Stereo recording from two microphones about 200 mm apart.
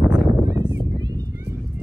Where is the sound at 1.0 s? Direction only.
20° right (ahead or behind).